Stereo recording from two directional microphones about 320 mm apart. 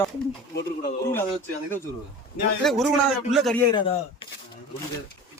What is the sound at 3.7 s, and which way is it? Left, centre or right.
Speech, centre.